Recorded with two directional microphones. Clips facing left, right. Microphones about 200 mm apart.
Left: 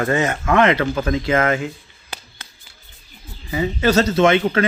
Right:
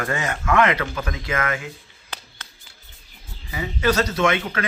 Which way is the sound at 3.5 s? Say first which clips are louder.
Left 4 dB; 30° left (ahead or behind).